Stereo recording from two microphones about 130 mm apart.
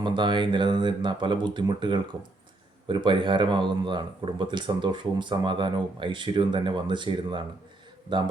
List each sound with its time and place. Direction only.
0.0 s speech: 35° right (ahead or behind)